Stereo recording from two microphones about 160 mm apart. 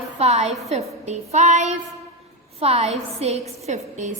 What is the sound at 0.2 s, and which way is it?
Speech, 45° right (ahead or behind).